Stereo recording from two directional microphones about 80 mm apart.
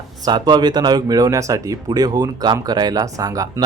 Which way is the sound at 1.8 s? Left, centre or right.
Right.